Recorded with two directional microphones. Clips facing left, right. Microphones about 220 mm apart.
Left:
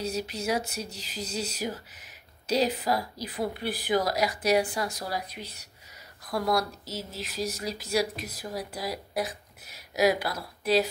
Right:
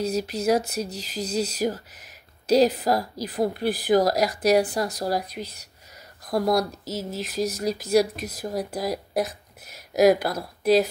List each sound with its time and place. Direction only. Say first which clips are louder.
0.0 s a woman's voice: right 7 dB; 40° right (ahead or behind)